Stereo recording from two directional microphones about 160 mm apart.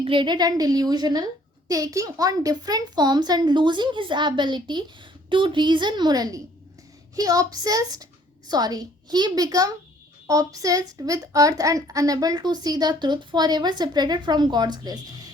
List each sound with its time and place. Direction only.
0.0 s a woman's voice: 30° right (ahead or behind)